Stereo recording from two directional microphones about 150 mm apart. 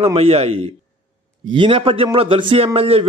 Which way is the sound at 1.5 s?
35° right (ahead or behind).